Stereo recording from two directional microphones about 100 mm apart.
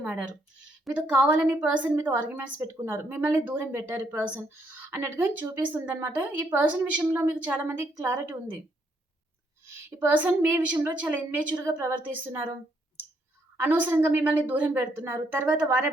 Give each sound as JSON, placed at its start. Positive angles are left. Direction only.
{"t": 0.0, "sound": "a woman's voice", "side_deg": -15}
{"t": 9.6, "sound": "a woman's voice", "side_deg": -20}
{"t": 13.6, "sound": "a woman's voice", "side_deg": -20}